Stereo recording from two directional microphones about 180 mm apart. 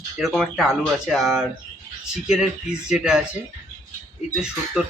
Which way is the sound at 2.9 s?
5° right (ahead or behind).